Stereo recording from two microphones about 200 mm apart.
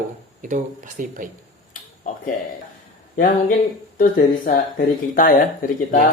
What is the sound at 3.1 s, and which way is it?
Speech, 40° left (ahead or behind).